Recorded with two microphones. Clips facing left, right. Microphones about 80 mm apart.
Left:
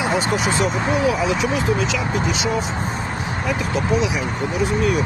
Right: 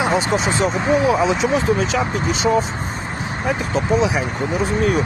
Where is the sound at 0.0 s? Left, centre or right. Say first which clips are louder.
Right 2 dB; right.